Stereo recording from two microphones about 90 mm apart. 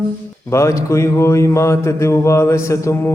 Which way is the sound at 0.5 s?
35° left (ahead or behind).